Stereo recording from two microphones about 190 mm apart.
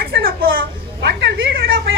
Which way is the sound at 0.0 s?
55° right (ahead or behind).